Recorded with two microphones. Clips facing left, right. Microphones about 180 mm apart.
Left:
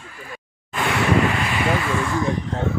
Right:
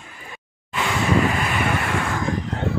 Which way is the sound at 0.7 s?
60° left (ahead or behind).